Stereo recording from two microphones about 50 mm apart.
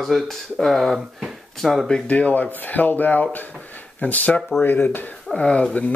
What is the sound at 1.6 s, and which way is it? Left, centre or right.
Speech, centre.